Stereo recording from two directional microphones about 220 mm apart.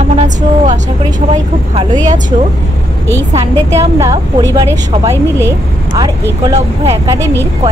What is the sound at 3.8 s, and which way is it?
A woman's voice, 15° right (ahead or behind).